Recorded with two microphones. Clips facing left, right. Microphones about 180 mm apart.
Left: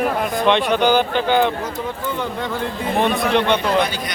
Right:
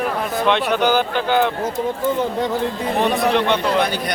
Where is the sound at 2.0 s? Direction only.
40° right (ahead or behind).